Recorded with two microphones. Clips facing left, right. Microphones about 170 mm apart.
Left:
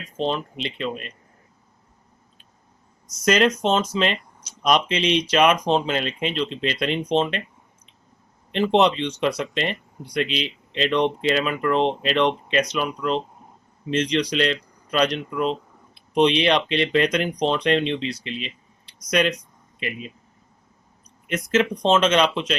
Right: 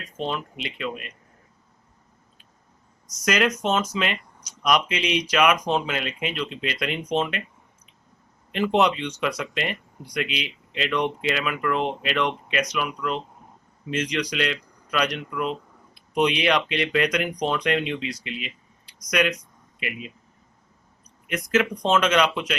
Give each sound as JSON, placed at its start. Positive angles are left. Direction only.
{"t": 0.2, "sound": "speech", "side_deg": 30}
{"t": 3.2, "sound": "speech", "side_deg": 30}
{"t": 8.5, "sound": "speech", "side_deg": 25}
{"t": 16.0, "sound": "a sound", "side_deg": 25}
{"t": 16.4, "sound": "speech", "side_deg": 25}
{"t": 21.2, "sound": "speech", "side_deg": 25}